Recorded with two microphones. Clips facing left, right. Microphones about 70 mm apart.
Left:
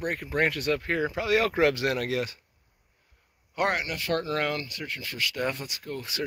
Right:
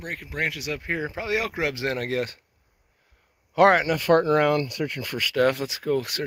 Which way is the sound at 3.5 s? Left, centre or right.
Right.